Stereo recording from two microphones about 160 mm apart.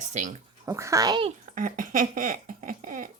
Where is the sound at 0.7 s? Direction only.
20° right (ahead or behind).